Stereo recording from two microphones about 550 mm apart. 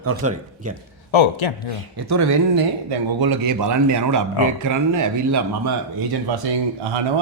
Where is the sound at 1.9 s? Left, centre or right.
Right.